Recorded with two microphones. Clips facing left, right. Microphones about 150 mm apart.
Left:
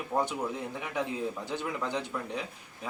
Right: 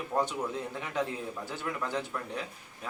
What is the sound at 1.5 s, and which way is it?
Speech, 15° left (ahead or behind).